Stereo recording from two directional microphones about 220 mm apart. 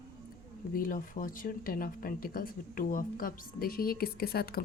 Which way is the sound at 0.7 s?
40° left (ahead or behind).